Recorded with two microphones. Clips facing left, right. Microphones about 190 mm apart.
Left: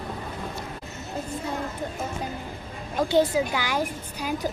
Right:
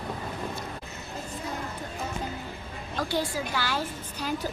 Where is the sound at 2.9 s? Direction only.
20° left (ahead or behind).